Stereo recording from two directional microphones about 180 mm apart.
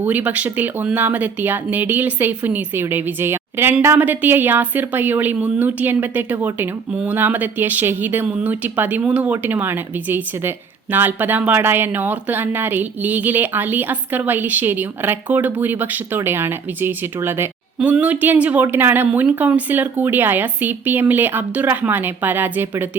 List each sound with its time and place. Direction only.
0.0 s speech: 10° right (ahead or behind)